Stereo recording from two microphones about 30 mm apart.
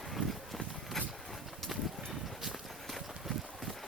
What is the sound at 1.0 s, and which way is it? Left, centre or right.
Vehicle, centre.